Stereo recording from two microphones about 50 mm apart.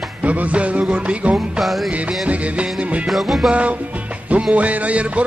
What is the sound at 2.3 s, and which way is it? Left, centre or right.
Music, right.